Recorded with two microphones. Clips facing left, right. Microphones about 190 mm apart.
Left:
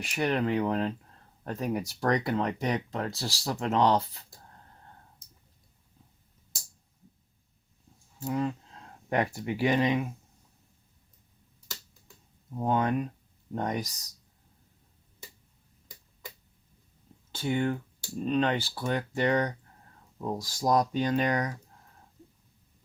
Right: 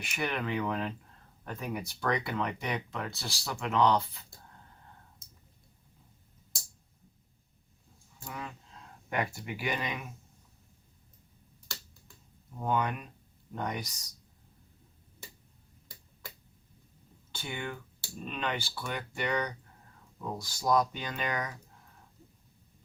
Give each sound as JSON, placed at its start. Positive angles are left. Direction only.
{"t": 0.0, "sound": "speech", "side_deg": 35}
{"t": 8.2, "sound": "speech", "side_deg": 30}
{"t": 12.5, "sound": "speech", "side_deg": 35}
{"t": 17.4, "sound": "speech", "side_deg": 35}